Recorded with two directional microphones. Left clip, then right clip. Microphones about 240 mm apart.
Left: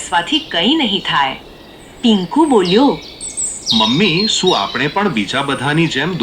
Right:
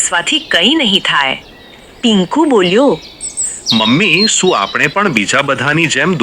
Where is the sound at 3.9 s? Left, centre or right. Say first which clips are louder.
Right 4 dB; right.